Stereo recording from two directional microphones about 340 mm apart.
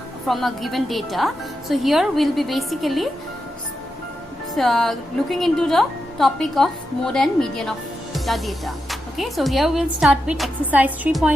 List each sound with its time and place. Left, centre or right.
0.3 s a woman's voice: centre
4.5 s a woman's voice: centre